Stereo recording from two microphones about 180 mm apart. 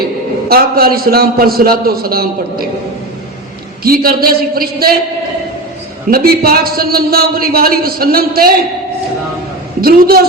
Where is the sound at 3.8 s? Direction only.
55° right (ahead or behind).